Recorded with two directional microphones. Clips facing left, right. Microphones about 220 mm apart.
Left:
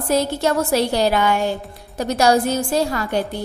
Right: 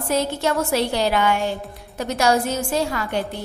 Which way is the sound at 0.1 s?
40° left (ahead or behind).